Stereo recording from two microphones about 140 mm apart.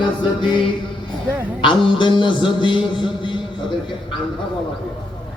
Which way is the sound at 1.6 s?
35° left (ahead or behind).